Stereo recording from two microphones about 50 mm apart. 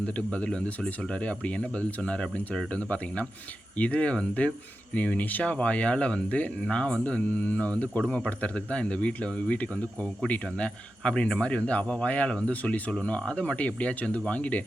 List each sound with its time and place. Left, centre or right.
0.0 s speech: left
11.0 s speech: centre